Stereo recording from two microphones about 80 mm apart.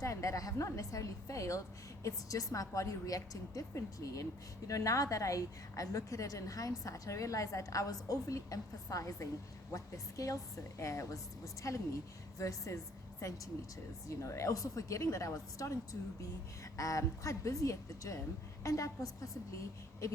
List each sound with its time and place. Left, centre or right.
0.0 s a woman's voice: left